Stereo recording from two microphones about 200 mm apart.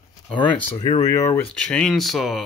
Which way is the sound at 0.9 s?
15° left (ahead or behind).